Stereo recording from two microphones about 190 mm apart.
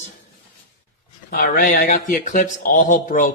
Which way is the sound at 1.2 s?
50° left (ahead or behind).